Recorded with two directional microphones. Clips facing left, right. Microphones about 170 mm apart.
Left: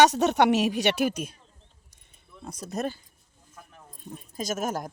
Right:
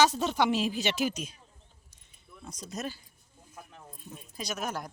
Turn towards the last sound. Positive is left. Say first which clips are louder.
# left 5 dB
turn(degrees=45)  # may be behind; listen again after turning